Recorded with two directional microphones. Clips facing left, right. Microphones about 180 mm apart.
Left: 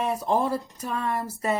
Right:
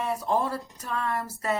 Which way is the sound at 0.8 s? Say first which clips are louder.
Right 2 dB; 20° left (ahead or behind).